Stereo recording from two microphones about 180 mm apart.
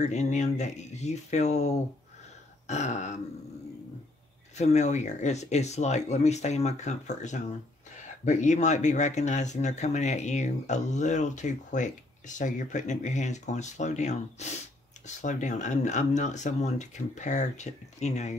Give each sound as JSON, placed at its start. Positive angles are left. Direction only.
{"t": 0.0, "sound": "speech", "side_deg": 40}
{"t": 4.6, "sound": "speech", "side_deg": 40}